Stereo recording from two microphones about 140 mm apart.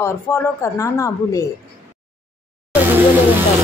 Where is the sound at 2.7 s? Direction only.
15° right (ahead or behind).